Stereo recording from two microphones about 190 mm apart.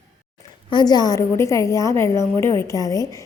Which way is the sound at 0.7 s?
20° left (ahead or behind).